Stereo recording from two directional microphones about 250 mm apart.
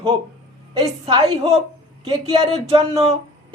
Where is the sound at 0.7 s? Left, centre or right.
Centre.